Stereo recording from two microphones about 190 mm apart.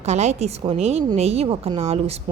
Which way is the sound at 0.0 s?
35° right (ahead or behind).